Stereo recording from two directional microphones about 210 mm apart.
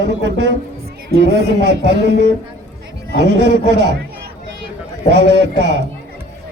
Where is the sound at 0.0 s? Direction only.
55° right (ahead or behind).